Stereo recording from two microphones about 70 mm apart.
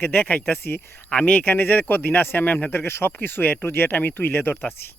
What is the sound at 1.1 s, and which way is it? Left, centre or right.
Speech, left.